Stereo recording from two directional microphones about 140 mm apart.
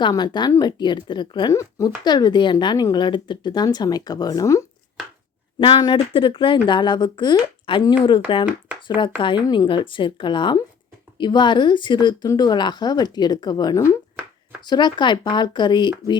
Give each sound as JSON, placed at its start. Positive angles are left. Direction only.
{"t": 0.0, "sound": "a woman's voice", "side_deg": 30}
{"t": 5.5, "sound": "a woman's voice", "side_deg": 40}
{"t": 8.4, "sound": "speech", "side_deg": -10}
{"t": 9.0, "sound": "a woman's voice", "side_deg": 35}